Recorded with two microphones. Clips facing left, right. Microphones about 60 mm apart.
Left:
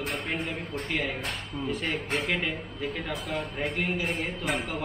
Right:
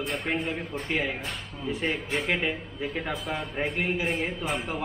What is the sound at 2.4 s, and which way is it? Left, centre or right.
Speech, centre.